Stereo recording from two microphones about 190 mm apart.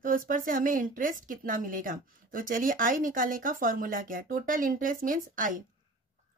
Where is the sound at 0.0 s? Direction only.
45° right (ahead or behind).